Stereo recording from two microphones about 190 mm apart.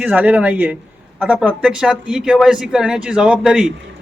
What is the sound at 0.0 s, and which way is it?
Speech, 10° right (ahead or behind).